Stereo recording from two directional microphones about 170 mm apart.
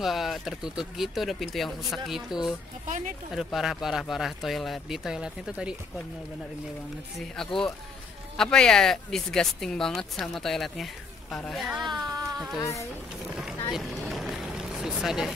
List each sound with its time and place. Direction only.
0.0 s speech: centre (ahead or behind)
7.2 s speech: 5° left (ahead or behind)
11.9 s speech: 20° right (ahead or behind)
12.5 s speech: 20° left (ahead or behind)
13.7 s vehicle: centre (ahead or behind)